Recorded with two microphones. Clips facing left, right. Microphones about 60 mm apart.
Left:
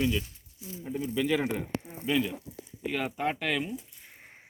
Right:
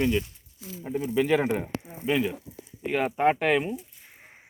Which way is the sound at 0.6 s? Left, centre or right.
Right.